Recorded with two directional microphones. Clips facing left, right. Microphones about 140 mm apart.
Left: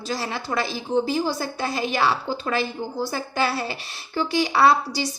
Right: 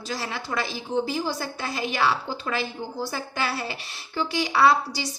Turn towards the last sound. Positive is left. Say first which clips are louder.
# left 2 dB
turn(degrees=35)  # may be behind; listen again after turning